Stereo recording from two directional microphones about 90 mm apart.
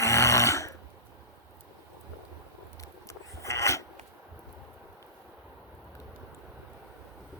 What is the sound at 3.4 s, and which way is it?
Filing, 35° left (ahead or behind).